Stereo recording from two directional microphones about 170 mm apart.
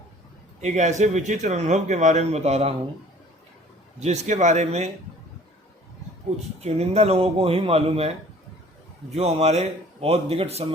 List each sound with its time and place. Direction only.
0.6 s a man's voice: 45° right (ahead or behind)
4.0 s speech: 45° right (ahead or behind)
6.6 s speech: 40° right (ahead or behind)
9.1 s speech: 40° right (ahead or behind)